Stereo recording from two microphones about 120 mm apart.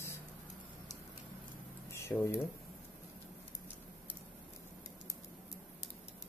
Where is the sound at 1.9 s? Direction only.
20° left (ahead or behind).